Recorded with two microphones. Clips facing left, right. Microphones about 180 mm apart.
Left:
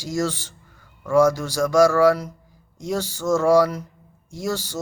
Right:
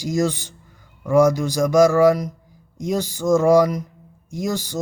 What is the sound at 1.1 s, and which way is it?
A man's voice, 15° right (ahead or behind).